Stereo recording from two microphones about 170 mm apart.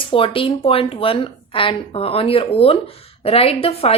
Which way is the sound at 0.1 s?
30° left (ahead or behind).